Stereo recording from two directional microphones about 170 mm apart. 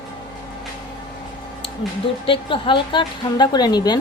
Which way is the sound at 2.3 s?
30° left (ahead or behind).